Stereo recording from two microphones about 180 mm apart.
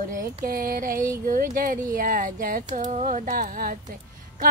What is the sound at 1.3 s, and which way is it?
Female singing, 50° right (ahead or behind).